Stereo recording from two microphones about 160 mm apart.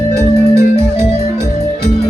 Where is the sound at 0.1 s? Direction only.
15° right (ahead or behind).